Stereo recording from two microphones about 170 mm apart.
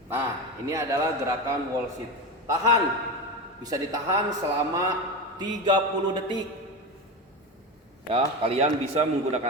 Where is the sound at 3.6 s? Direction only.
20° right (ahead or behind).